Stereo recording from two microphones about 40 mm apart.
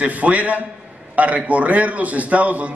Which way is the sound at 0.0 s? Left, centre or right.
Right.